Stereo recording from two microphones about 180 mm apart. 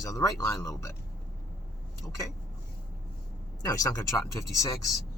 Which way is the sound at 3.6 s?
20° left (ahead or behind).